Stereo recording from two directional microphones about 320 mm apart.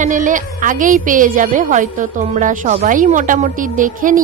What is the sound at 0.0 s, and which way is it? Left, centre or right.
A woman's voice, right.